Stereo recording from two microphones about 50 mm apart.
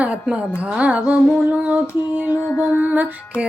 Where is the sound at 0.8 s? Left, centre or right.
Right.